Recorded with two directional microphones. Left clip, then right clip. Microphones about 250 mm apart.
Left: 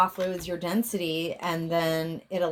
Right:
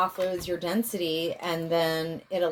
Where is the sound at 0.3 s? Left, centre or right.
Left.